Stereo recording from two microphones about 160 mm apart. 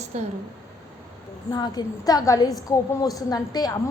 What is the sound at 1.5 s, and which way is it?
A woman's voice, 25° left (ahead or behind).